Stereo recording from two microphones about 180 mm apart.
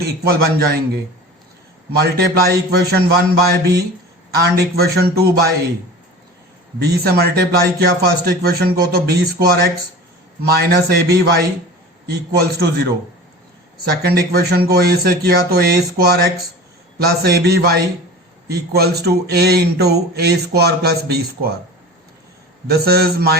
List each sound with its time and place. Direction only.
0.0 s speech: 60° right (ahead or behind)
2.0 s speech: 60° right (ahead or behind)
6.8 s speech: 60° right (ahead or behind)
22.6 s speech: 60° right (ahead or behind)